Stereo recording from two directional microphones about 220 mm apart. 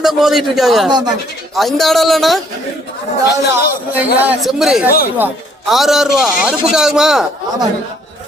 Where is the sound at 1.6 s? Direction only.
Centre (ahead or behind).